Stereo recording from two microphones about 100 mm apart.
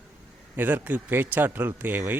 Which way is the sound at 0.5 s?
15° right (ahead or behind).